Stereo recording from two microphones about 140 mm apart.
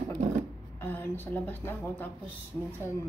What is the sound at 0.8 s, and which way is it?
A woman's voice, 15° left (ahead or behind).